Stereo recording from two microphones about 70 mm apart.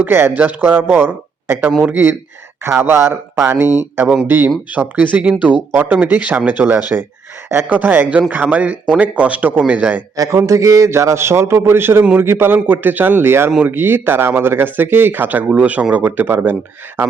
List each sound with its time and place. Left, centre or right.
0.0 s a man's voice: right
10.2 s a man's voice: right